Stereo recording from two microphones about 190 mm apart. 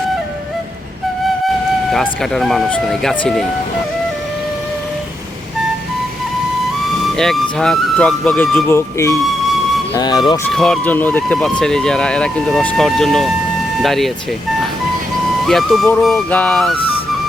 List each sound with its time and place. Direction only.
1.9 s speech: centre (ahead or behind)
7.2 s speech: 5° left (ahead or behind); by 10.4 s 20° left (ahead or behind)
10.5 s speech: 5° left (ahead or behind)
15.4 s speech: centre (ahead or behind)